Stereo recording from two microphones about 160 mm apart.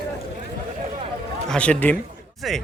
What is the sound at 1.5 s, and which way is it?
A man's voice, 10° left (ahead or behind).